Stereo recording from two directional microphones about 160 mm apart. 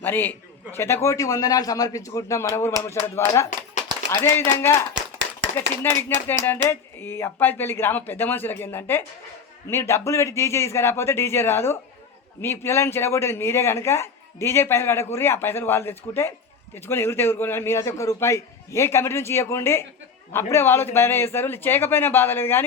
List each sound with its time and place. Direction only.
0.0 s a man's voice: 10° left (ahead or behind)